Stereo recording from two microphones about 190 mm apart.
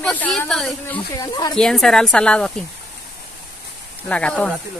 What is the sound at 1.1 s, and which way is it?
Speech, 20° left (ahead or behind).